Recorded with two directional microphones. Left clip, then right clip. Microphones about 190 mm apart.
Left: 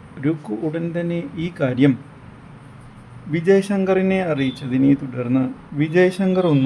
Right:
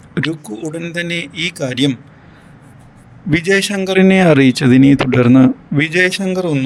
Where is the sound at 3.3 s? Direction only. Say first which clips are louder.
Right 3 dB; 45° right (ahead or behind).